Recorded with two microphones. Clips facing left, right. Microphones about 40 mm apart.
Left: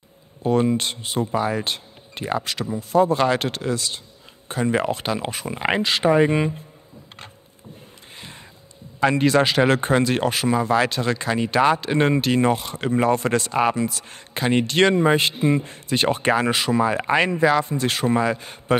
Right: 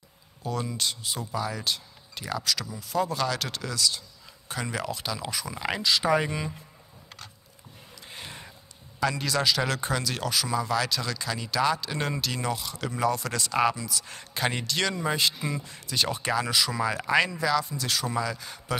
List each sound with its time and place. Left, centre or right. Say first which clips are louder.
0.4 s speech: left 11 dB; left
8.2 s a sound: left 1 dB; centre
9.0 s speech: left 8 dB; left